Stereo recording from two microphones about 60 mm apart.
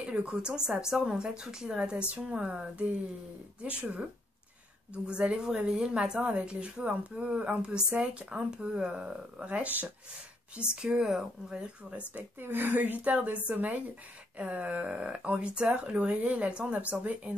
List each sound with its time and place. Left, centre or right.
0.0 s speech: centre
10.7 s speech: centre
12.1 s speech: right